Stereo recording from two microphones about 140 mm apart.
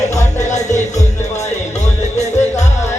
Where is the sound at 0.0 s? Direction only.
55° left (ahead or behind).